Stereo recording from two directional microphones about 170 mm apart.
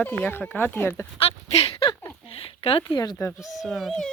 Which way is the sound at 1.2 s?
35° left (ahead or behind).